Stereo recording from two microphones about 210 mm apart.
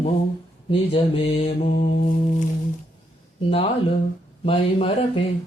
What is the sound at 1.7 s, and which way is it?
Mantra, 45° left (ahead or behind).